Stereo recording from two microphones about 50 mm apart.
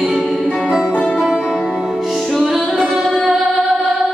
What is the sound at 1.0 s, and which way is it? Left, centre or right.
Music, centre.